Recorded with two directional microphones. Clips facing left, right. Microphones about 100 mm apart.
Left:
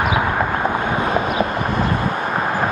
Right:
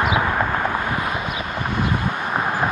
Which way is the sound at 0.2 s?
10° left (ahead or behind).